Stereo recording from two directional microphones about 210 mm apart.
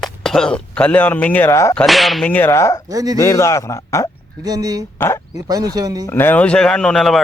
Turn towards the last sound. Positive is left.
turn(degrees=0)  # may be behind; listen again after turning